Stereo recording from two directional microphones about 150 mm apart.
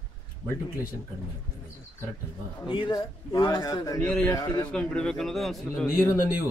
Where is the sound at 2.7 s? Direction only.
30° left (ahead or behind).